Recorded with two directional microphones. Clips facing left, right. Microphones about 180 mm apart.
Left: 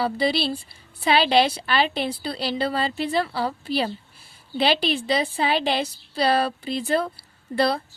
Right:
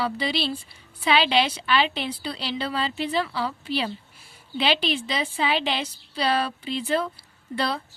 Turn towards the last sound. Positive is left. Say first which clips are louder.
# left 5 dB
turn(degrees=40)  # may be behind; listen again after turning